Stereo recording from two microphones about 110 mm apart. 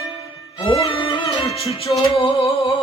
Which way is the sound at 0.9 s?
50° left (ahead or behind).